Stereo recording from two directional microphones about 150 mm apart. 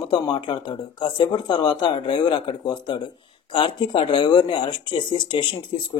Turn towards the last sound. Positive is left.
turn(degrees=35)  # may be behind; listen again after turning